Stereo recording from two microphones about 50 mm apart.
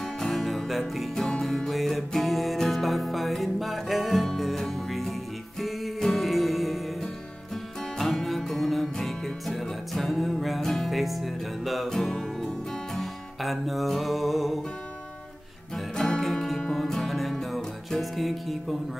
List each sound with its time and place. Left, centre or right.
0.0 s music: centre
8.0 s music: centre
11.9 s music: centre
15.7 s music: centre